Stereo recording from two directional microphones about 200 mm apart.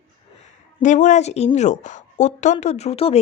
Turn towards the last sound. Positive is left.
turn(degrees=30)  # may be behind; listen again after turning